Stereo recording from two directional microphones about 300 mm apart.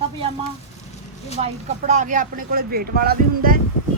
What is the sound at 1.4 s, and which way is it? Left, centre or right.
Speech, right.